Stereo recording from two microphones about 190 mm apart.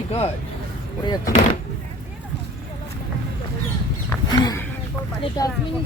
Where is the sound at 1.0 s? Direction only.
20° left (ahead or behind).